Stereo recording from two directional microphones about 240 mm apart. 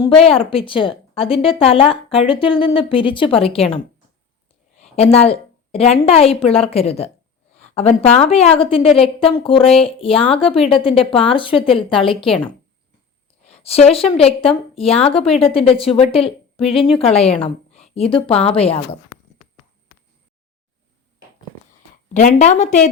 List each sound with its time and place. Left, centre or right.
0.0 s a woman's voice: left
4.8 s a woman's voice: left
13.5 s a woman's voice: left
22.1 s a woman's voice: left